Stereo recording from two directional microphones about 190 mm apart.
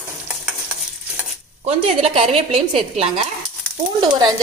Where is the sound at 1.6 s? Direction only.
30° right (ahead or behind).